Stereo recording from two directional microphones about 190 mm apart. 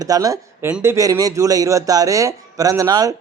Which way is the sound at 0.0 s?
20° right (ahead or behind).